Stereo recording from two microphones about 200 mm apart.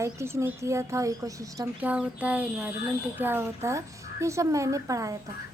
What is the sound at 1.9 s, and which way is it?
A woman's voice, 5° right (ahead or behind).